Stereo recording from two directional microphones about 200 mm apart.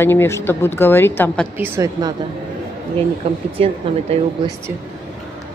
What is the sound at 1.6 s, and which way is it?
Speech, 15° right (ahead or behind).